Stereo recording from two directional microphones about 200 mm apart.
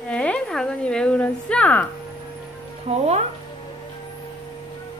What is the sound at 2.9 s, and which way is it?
Music, 35° right (ahead or behind).